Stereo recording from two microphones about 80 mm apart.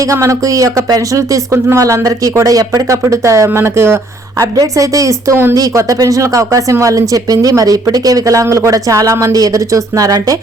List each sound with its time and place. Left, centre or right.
0.0 s speech: right
4.5 s speech: right